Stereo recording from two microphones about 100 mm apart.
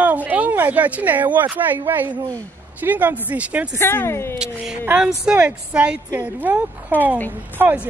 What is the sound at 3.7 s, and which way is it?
Speech, 20° left (ahead or behind).